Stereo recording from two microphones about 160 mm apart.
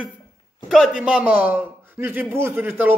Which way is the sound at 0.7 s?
5° right (ahead or behind).